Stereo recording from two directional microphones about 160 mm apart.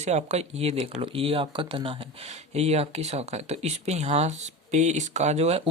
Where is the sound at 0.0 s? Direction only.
45° right (ahead or behind).